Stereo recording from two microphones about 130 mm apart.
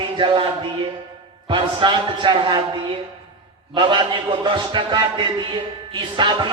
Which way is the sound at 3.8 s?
35° right (ahead or behind).